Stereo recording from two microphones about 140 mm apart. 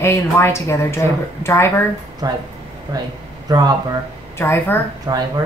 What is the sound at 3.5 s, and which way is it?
Speech, 30° right (ahead or behind).